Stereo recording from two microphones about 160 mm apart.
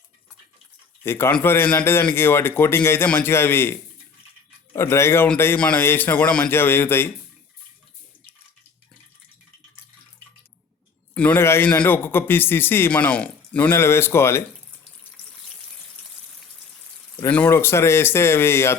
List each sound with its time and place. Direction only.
1.0 s a man's voice: 15° left (ahead or behind)
11.1 s a man's voice: 10° left (ahead or behind)
17.2 s a man's voice: 10° left (ahead or behind)